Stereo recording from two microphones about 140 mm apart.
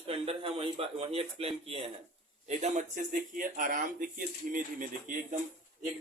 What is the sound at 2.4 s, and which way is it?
Speech, 55° right (ahead or behind).